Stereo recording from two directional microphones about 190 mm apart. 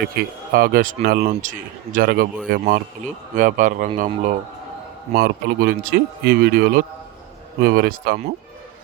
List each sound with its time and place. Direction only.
0.0 s speech: 50° right (ahead or behind)
5.1 s speech: 55° right (ahead or behind)